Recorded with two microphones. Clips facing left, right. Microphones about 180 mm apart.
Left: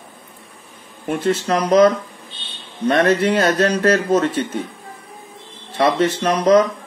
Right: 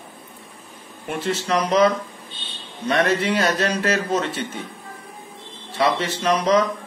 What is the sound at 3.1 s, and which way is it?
A man's voice, 50° left (ahead or behind).